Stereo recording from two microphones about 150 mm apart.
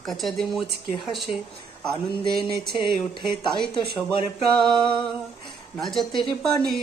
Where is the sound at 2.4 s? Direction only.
90° right.